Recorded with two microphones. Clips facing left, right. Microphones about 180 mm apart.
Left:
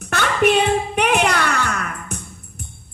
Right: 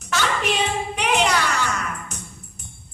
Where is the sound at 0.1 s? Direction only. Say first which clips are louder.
Left 6 dB; 55° left (ahead or behind).